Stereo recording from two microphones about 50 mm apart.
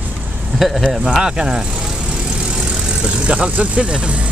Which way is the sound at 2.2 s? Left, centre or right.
Centre.